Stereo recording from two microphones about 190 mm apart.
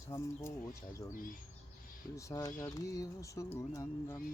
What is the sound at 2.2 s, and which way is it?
Speech, 15° left (ahead or behind).